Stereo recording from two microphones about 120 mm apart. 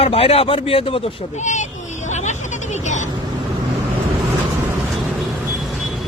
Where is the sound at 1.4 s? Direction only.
85° left.